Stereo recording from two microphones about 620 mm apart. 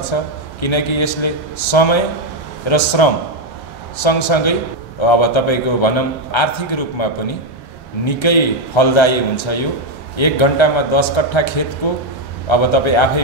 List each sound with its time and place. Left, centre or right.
0.1 s a man's voice: left
4.0 s a man's voice: left